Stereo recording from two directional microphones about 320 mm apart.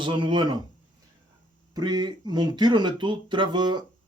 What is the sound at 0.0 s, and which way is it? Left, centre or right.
Speech, centre.